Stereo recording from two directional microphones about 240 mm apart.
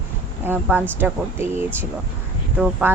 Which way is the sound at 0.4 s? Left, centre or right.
Centre.